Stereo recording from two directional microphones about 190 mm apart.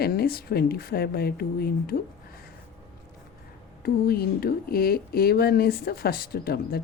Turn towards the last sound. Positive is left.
turn(degrees=55)  # may be behind; listen again after turning